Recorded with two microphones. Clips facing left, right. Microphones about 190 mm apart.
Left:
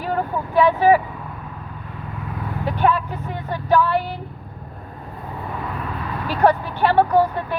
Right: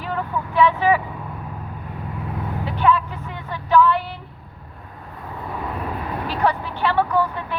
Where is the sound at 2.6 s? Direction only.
45° left (ahead or behind).